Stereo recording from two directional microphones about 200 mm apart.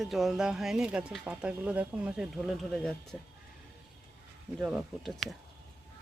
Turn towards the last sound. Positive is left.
turn(degrees=0)  # may be behind; listen again after turning